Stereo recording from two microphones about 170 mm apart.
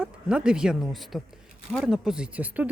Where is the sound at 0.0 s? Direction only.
5° right (ahead or behind).